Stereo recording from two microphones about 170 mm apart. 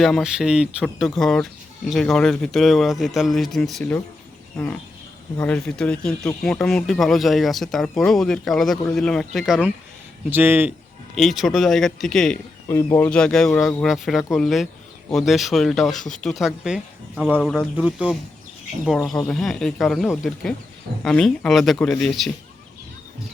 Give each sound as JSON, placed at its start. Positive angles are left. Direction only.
{"t": 0.0, "sound": "a man's voice", "side_deg": 0}
{"t": 10.2, "sound": "speech", "side_deg": -10}
{"t": 11.1, "sound": "a man's voice", "side_deg": 0}
{"t": 12.6, "sound": "a man's voice", "side_deg": 15}